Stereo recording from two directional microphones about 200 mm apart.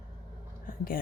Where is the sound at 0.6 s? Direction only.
45° left (ahead or behind).